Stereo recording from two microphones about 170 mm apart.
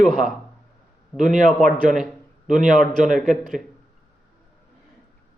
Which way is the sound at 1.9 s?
5° right (ahead or behind).